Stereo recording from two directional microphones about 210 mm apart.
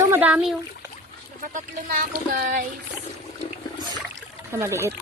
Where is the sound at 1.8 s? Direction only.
45° right (ahead or behind).